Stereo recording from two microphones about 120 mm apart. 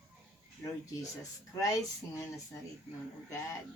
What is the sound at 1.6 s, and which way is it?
Speech, 25° left (ahead or behind).